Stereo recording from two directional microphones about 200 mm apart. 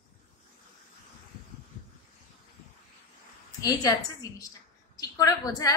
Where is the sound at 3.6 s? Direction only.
15° left (ahead or behind).